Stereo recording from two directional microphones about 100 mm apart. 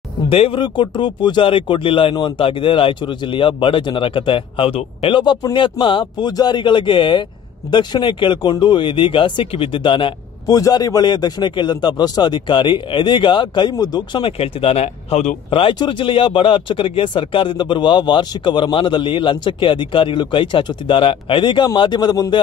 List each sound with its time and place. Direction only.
0.3 s speech: 70° left (ahead or behind)
0.6 s a man's voice: 50° left (ahead or behind); by 5.2 s 70° left (ahead or behind)
5.2 s a man's voice: 45° left (ahead or behind)
10.4 s a man's voice: 40° left (ahead or behind)
14.4 s a man's voice: 75° left (ahead or behind); by 22.3 s 40° left (ahead or behind)